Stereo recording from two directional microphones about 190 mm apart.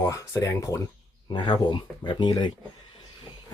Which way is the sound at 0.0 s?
15° left (ahead or behind).